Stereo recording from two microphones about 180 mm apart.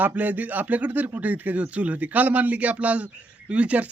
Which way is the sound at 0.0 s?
10° right (ahead or behind).